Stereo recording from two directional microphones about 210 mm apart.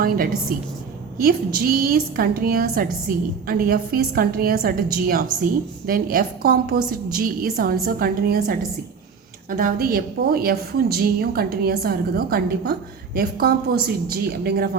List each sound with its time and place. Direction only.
0.0 s a woman's voice: 45° right (ahead or behind)
1.5 s a woman's voice: 45° right (ahead or behind)